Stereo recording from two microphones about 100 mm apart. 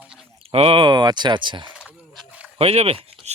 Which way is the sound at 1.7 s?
10° right (ahead or behind).